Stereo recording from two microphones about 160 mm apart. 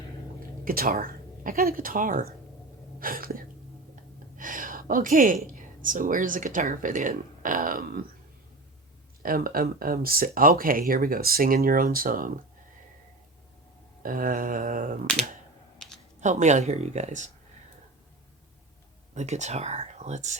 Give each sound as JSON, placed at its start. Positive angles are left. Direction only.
{"t": 0.6, "sound": "speech", "side_deg": -65}
{"t": 9.2, "sound": "speech", "side_deg": -65}
{"t": 14.0, "sound": "speech", "side_deg": -60}
{"t": 15.8, "sound": "a sound", "side_deg": 5}
{"t": 16.2, "sound": "speech", "side_deg": -50}
{"t": 19.1, "sound": "speech", "side_deg": -45}